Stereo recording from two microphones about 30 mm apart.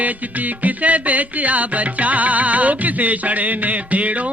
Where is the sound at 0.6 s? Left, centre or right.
Right.